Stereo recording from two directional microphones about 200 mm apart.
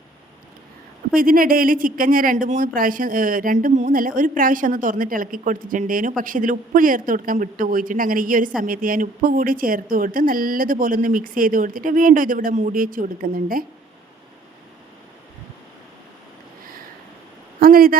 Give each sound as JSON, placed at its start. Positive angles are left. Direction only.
{"t": 1.1, "sound": "speech", "side_deg": -45}
{"t": 17.6, "sound": "speech", "side_deg": -45}